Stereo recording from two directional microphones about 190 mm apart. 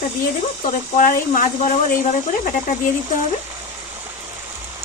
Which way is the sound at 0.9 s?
40° left (ahead or behind).